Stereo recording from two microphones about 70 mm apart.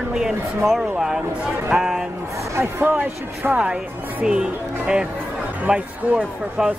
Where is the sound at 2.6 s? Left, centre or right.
Right.